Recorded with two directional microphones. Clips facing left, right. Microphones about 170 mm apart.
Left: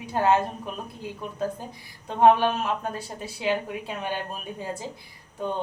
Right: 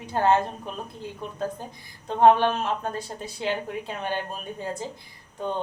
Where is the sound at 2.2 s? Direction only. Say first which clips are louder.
Right 1 dB; 10° left (ahead or behind).